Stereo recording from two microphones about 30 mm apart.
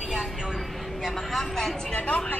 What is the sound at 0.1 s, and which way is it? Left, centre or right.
Train, centre.